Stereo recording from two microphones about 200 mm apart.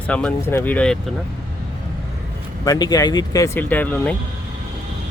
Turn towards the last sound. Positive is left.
turn(degrees=5)  # may be behind; listen again after turning